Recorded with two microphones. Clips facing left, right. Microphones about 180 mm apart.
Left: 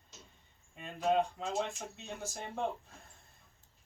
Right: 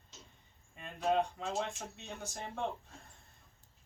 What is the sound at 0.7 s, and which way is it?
Speech, centre (ahead or behind).